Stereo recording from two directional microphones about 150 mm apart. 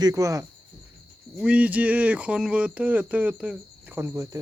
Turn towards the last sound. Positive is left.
turn(degrees=-20)  # may be behind; listen again after turning